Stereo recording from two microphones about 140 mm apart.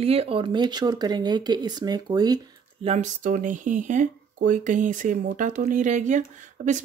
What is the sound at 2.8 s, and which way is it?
Speech, 55° right (ahead or behind).